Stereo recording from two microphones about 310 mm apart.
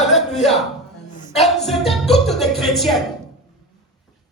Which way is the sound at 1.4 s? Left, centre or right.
Centre.